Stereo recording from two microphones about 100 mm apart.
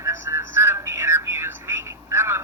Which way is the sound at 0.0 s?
30° right (ahead or behind).